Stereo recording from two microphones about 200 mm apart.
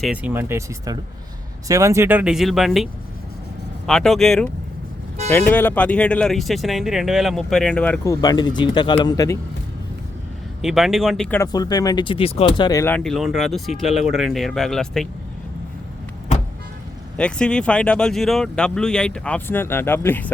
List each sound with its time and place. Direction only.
0.0 s speech: 5° right (ahead or behind)
5.5 s speech: 10° left (ahead or behind)
8.0 s speech: 20° left (ahead or behind)
10.6 s speech: centre (ahead or behind)
11.3 s speech: 20° left (ahead or behind)
13.0 s speech: centre (ahead or behind)
17.2 s speech: 5° left (ahead or behind)